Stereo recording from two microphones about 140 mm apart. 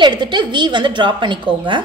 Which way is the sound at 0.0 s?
30° right (ahead or behind).